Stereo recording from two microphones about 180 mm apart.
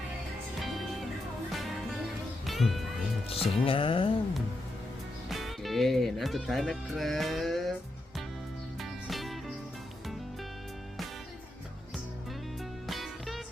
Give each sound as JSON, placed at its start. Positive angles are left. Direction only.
{"t": 2.5, "sound": "speech", "side_deg": 0}
{"t": 3.2, "sound": "music", "side_deg": 30}
{"t": 5.3, "sound": "speech", "side_deg": 0}
{"t": 8.8, "sound": "music", "side_deg": 0}
{"t": 12.9, "sound": "music", "side_deg": 0}